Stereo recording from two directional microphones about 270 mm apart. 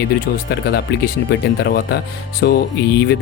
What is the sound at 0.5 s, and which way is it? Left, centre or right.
Speech, left.